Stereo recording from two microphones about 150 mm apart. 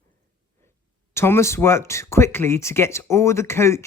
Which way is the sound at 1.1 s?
15° left (ahead or behind).